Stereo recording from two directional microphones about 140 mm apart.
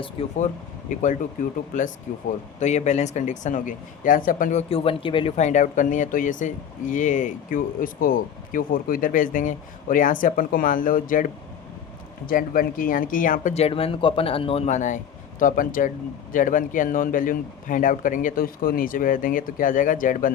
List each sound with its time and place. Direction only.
0.2 s a man's voice: 40° left (ahead or behind)
0.9 s speech: 65° left (ahead or behind)
2.1 s speech: 60° left (ahead or behind)
4.7 s speech: 40° left (ahead or behind)
5.4 s speech: 60° left (ahead or behind); by 11.3 s 75° left (ahead or behind)
12.2 s speech: 90° left
13.5 s a man's voice: 45° left (ahead or behind); by 20.3 s 70° left (ahead or behind)